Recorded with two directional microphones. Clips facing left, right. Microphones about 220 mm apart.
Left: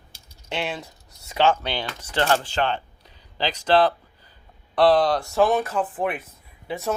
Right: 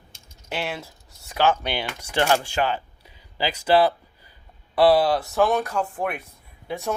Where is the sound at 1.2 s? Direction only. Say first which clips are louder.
Left 1 dB; centre (ahead or behind).